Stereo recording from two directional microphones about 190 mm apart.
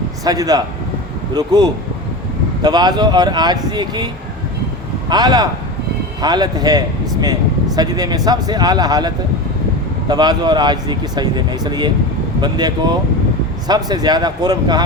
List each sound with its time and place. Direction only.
0.3 s speech: 20° right (ahead or behind)